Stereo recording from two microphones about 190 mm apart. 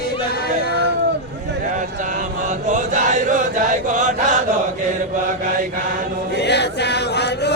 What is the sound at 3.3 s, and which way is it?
Chant, 40° right (ahead or behind).